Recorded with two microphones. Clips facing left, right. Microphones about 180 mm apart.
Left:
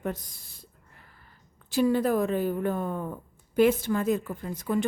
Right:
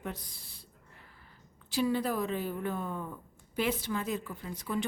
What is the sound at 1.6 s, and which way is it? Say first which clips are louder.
Speech: left 6 dB; 50° left (ahead or behind).